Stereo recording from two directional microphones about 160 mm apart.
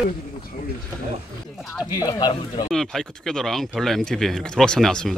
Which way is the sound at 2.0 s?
25° left (ahead or behind).